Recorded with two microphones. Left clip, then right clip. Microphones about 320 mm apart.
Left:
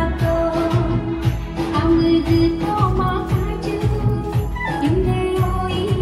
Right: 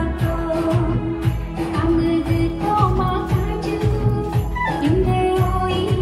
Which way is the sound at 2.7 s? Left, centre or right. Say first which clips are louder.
Right 1 dB; centre.